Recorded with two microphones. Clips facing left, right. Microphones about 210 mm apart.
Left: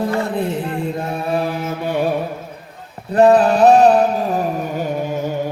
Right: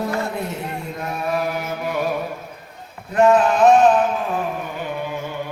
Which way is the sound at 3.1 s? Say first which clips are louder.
Left 4 dB; 35° left (ahead or behind).